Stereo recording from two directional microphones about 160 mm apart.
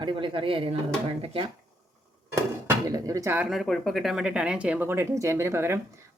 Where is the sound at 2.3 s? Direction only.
20° right (ahead or behind).